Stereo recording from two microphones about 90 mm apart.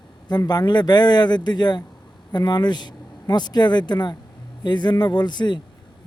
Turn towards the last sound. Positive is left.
turn(degrees=55)  # may be behind; listen again after turning